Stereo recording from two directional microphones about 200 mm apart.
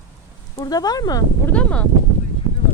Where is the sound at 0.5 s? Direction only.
20° left (ahead or behind).